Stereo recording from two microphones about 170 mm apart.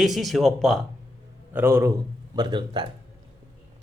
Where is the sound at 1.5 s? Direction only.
15° right (ahead or behind).